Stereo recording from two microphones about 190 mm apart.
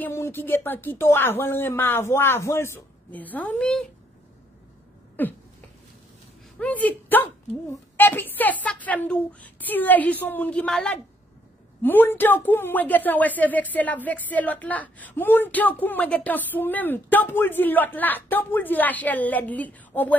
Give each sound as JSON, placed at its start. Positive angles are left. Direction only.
{"t": 0.0, "sound": "a woman's voice", "side_deg": 10}
{"t": 5.2, "sound": "a woman's voice", "side_deg": 10}
{"t": 6.6, "sound": "a woman's voice", "side_deg": 10}